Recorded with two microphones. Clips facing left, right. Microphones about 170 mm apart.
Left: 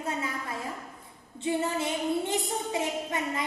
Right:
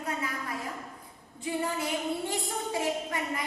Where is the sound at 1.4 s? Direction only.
25° left (ahead or behind).